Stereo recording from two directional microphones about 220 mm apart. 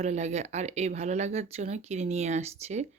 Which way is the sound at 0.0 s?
30° right (ahead or behind).